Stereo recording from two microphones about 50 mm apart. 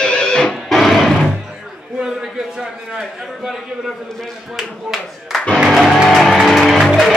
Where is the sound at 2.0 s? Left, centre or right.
Centre.